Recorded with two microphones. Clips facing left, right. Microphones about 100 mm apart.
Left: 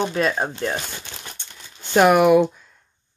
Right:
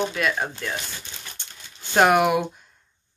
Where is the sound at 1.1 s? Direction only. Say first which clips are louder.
Left 3 dB; 65° left (ahead or behind).